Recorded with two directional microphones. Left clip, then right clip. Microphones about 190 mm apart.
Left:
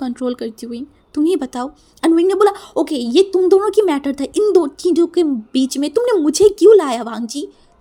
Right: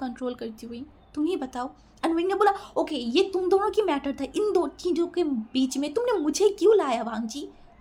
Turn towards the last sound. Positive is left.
turn(degrees=45)  # may be behind; listen again after turning